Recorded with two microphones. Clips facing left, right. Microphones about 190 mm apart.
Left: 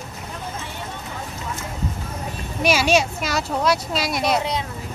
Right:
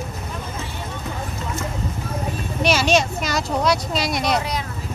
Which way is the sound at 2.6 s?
10° left (ahead or behind).